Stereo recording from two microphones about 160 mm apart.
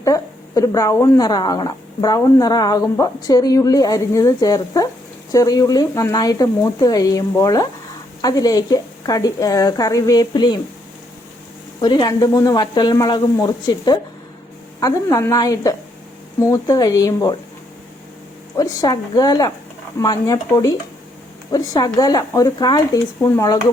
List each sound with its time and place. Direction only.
0.0 s speech: 20° left (ahead or behind)
11.8 s speech: 25° left (ahead or behind)
18.5 s speech: 25° left (ahead or behind)